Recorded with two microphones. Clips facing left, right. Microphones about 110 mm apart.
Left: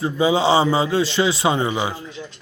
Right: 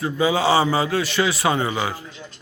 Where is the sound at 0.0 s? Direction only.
25° left (ahead or behind).